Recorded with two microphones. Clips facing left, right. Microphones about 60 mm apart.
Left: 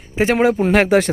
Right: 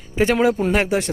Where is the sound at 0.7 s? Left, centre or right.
Left.